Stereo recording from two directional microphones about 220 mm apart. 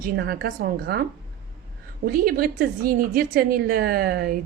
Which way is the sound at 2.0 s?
40° right (ahead or behind).